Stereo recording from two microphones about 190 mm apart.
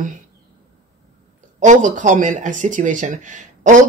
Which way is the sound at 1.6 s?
40° right (ahead or behind).